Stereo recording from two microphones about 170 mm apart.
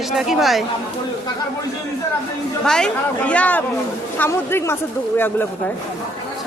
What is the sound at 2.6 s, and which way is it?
Speech, 5° left (ahead or behind).